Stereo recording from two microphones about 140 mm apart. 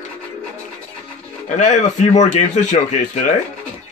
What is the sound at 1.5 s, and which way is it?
Speech, 60° left (ahead or behind).